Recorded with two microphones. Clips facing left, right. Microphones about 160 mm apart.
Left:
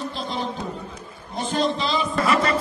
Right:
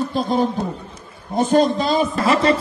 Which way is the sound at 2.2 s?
30° right (ahead or behind).